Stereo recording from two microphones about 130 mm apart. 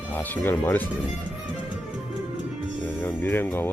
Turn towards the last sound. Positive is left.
turn(degrees=15)  # may be behind; listen again after turning